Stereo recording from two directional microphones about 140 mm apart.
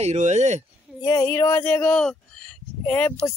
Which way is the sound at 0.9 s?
25° left (ahead or behind).